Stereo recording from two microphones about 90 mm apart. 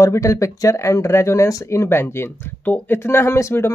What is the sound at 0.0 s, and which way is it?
Speech, 35° left (ahead or behind).